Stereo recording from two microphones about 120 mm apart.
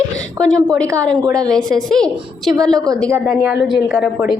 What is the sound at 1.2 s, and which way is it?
Speech, 30° right (ahead or behind).